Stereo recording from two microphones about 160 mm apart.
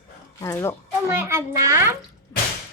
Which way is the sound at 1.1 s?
15° right (ahead or behind).